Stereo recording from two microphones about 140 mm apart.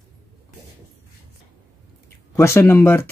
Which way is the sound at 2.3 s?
20° left (ahead or behind).